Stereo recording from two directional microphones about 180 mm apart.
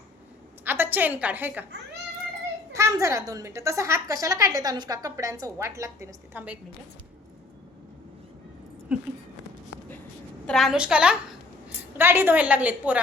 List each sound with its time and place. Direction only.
0.6 s a woman's voice: 10° right (ahead or behind)
2.7 s a woman's voice: 15° right (ahead or behind)
8.9 s a sound: 5° right (ahead or behind)
10.4 s a woman's voice: centre (ahead or behind)